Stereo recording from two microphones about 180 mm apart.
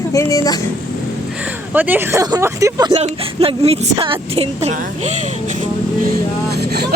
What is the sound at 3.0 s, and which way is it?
Speech, 35° right (ahead or behind).